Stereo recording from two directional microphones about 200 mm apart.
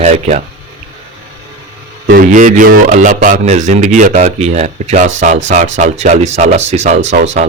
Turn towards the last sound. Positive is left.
turn(degrees=-35)  # may be behind; listen again after turning